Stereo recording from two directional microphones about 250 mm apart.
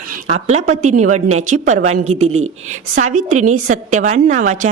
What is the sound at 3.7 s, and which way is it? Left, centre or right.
Speech, right.